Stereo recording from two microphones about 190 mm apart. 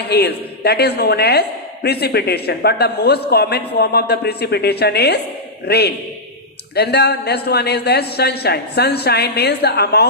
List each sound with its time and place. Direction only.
0.1 s a woman's voice: 60° left (ahead or behind)